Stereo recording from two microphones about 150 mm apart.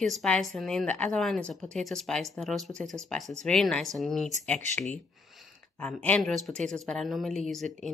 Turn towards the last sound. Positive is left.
turn(degrees=0)  # may be behind; listen again after turning